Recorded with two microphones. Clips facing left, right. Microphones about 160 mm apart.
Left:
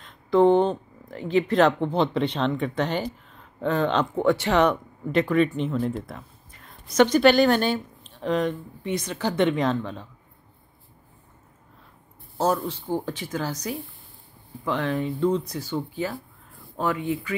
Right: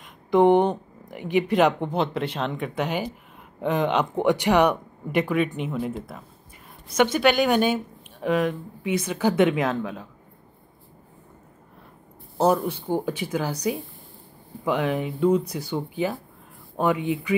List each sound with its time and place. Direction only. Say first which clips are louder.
0.0 s speech: even; 15° right (ahead or behind)
12.4 s speech: right 3 dB; 15° right (ahead or behind)